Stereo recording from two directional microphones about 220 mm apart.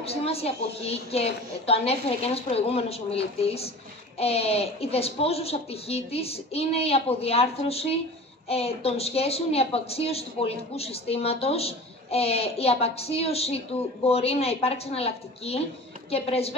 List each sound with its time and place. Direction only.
0.0 s a woman's voice: 25° left (ahead or behind)